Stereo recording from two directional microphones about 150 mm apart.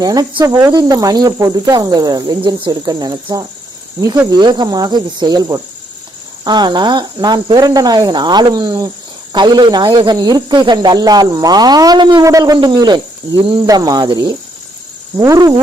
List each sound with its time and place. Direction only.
0.0 s speech: 25° right (ahead or behind)